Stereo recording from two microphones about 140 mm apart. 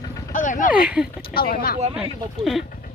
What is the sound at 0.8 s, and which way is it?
Speech, 5° right (ahead or behind).